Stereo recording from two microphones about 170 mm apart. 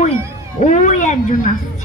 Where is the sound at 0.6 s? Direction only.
45° left (ahead or behind).